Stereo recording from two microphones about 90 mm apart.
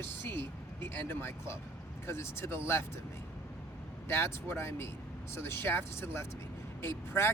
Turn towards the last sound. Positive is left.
turn(degrees=30)  # may be behind; listen again after turning